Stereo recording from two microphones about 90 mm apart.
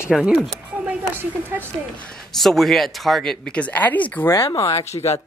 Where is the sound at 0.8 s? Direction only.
20° right (ahead or behind).